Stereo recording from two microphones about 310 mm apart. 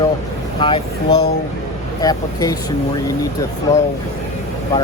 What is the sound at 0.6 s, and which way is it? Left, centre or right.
Speech, centre.